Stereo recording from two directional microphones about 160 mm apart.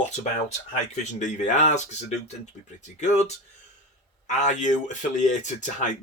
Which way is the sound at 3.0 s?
45° left (ahead or behind).